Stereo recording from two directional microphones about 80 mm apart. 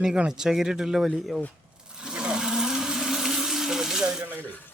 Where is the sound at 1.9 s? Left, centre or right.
Centre.